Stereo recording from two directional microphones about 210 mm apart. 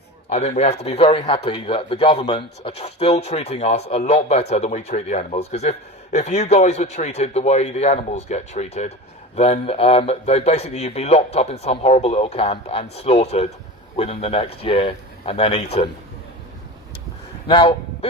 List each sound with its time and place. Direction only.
0.3 s a man's voice: 30° left (ahead or behind)
17.5 s a man's voice: 20° left (ahead or behind)